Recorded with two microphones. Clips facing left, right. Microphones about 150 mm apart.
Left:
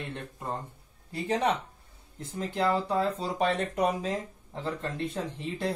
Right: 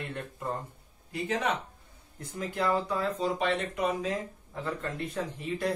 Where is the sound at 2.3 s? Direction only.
30° left (ahead or behind).